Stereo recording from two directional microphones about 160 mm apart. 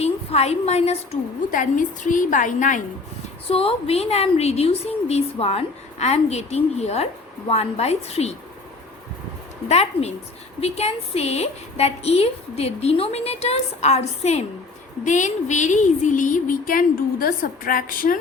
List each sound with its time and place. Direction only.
0.0 s a woman's voice: 40° left (ahead or behind)
1.5 s a woman's voice: 55° left (ahead or behind)
3.5 s a woman's voice: 35° left (ahead or behind)
9.6 s a woman's voice: 40° left (ahead or behind)
15.0 s a sound: 50° left (ahead or behind)